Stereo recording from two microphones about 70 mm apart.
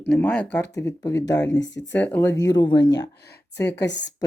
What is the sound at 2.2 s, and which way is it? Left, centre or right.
Speech, left.